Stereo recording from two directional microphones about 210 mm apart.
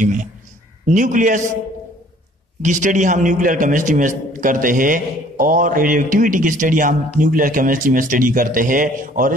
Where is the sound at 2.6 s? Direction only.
35° right (ahead or behind).